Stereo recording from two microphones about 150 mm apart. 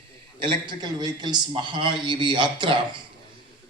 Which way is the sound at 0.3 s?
35° right (ahead or behind).